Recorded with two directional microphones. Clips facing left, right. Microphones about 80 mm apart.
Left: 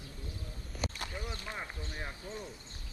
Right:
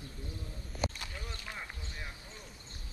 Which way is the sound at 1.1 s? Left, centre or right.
Left.